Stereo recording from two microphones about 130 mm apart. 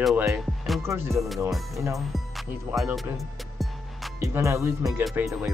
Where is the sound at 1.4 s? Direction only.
Centre (ahead or behind).